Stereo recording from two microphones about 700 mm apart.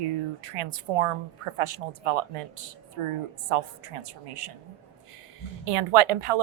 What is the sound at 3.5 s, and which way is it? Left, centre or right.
Speech, right.